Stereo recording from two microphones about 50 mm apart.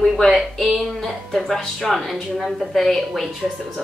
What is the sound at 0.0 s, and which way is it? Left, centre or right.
Speech, centre.